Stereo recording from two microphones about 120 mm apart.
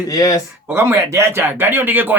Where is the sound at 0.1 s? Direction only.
30° left (ahead or behind).